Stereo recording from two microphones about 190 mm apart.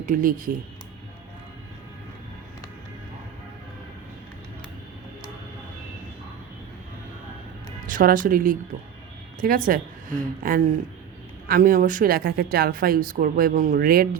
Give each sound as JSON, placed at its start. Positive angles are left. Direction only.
{"t": 0.0, "sound": "a woman's voice", "side_deg": -45}
{"t": 7.9, "sound": "a woman's voice", "side_deg": -45}